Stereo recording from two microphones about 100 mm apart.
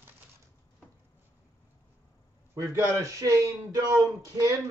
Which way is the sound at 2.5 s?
35° right (ahead or behind).